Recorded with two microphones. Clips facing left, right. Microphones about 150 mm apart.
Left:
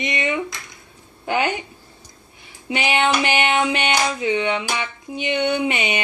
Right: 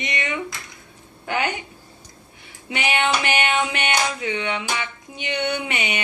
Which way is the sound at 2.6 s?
25° left (ahead or behind).